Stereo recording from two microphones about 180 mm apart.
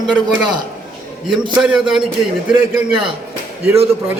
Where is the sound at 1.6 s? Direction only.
Centre (ahead or behind).